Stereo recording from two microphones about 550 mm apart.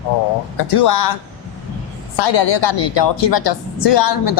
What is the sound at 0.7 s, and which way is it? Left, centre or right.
Speech, left.